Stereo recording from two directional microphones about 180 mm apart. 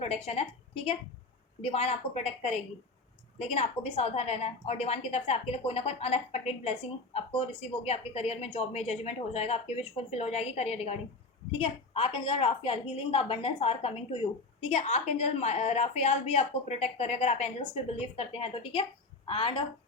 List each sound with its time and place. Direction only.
0.0 s a woman's voice: 35° left (ahead or behind)